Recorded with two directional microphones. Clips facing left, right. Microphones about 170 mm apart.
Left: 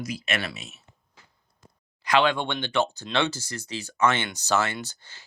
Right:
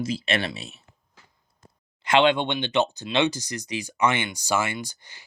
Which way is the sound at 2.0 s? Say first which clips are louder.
Right 3 dB; 25° right (ahead or behind).